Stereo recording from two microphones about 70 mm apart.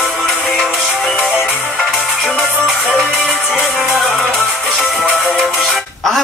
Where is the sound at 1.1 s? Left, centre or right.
Left.